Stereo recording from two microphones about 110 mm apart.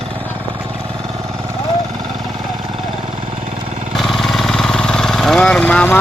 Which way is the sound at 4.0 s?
Centre (ahead or behind).